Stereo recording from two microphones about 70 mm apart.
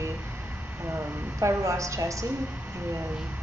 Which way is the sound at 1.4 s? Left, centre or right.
Right.